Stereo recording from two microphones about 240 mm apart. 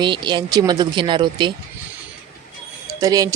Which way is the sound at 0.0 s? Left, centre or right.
Centre.